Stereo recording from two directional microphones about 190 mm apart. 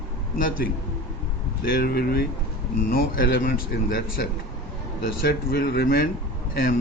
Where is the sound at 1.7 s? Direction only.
50° left (ahead or behind).